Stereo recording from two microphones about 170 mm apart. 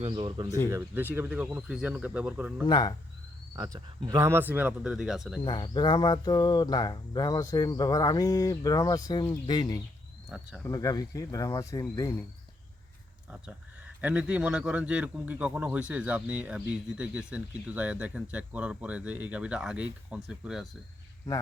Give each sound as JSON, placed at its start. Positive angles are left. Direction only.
{"t": 0.0, "sound": "speech", "side_deg": -30}
{"t": 0.7, "sound": "a man's voice", "side_deg": -10}
{"t": 2.6, "sound": "speech", "side_deg": 25}
{"t": 3.5, "sound": "a man's voice", "side_deg": -20}
{"t": 5.4, "sound": "speech", "side_deg": 30}
{"t": 13.4, "sound": "a man's voice", "side_deg": -10}